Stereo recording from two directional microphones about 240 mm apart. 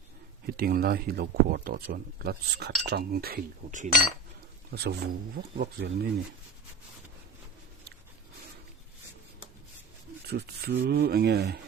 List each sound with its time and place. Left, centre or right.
0.4 s speech: right
4.7 s speech: right
10.2 s speech: right